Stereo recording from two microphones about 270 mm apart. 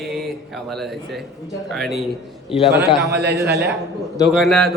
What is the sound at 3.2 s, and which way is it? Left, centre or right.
Speech, right.